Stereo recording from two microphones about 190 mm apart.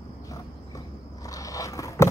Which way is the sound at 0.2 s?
20° left (ahead or behind).